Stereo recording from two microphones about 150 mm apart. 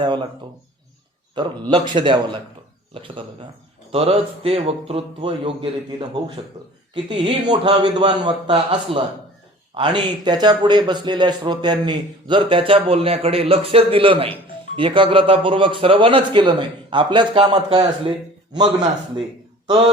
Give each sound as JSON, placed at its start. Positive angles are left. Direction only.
{"t": 0.0, "sound": "a man's voice", "side_deg": -30}
{"t": 1.4, "sound": "a man's voice", "side_deg": -30}